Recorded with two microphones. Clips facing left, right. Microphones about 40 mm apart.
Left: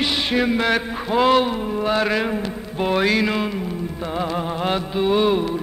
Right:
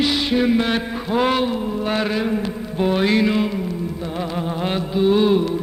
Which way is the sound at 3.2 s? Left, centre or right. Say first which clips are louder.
Right 2 dB; centre.